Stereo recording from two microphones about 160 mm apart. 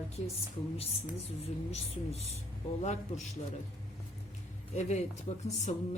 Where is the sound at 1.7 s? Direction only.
40° left (ahead or behind).